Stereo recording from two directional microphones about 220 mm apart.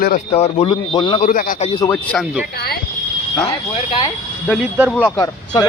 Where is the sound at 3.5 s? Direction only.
20° left (ahead or behind).